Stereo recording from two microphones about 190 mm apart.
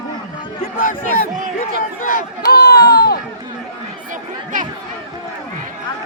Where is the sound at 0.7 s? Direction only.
45° left (ahead or behind).